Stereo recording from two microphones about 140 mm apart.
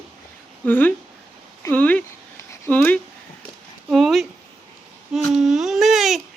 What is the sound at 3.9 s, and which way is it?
Babbling, centre (ahead or behind).